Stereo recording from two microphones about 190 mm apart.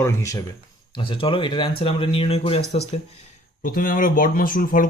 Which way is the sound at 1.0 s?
25° left (ahead or behind).